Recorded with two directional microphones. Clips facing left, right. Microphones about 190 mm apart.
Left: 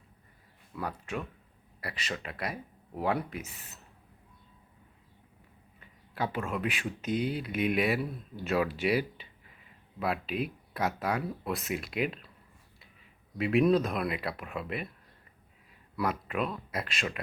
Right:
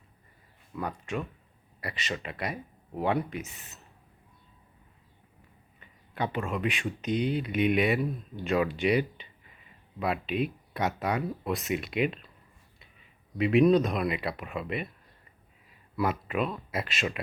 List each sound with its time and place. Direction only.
0.8 s speech: 5° left (ahead or behind)
5.8 s speech: 5° left (ahead or behind)
13.4 s speech: centre (ahead or behind)
16.0 s speech: centre (ahead or behind)